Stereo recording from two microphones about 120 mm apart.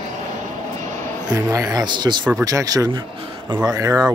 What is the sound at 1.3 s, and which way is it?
Speech, 30° right (ahead or behind).